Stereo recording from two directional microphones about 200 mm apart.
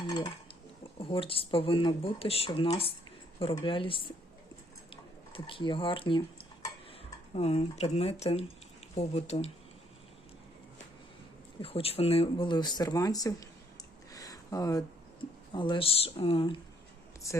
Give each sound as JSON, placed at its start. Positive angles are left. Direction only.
{"t": 0.9, "sound": "speech", "side_deg": 25}
{"t": 4.9, "sound": "a sound", "side_deg": 25}
{"t": 7.3, "sound": "speech", "side_deg": 30}
{"t": 11.6, "sound": "speech", "side_deg": 30}
{"t": 14.1, "sound": "a sound", "side_deg": 15}
{"t": 15.5, "sound": "speech", "side_deg": 25}